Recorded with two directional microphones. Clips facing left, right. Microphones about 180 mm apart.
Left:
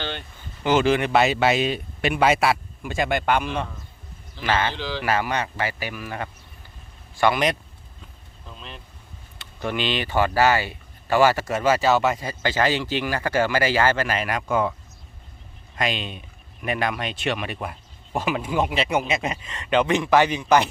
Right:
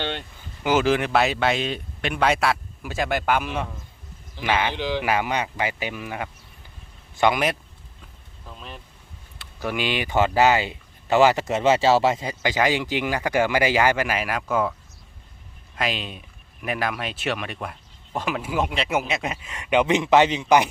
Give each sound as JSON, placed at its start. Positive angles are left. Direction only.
{"t": 0.6, "sound": "speech", "side_deg": -5}
{"t": 8.4, "sound": "vehicle", "side_deg": -5}
{"t": 9.4, "sound": "speech", "side_deg": -5}
{"t": 12.2, "sound": "speech", "side_deg": -15}